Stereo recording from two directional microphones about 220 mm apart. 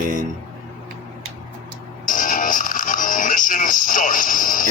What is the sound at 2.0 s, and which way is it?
Music, 35° left (ahead or behind).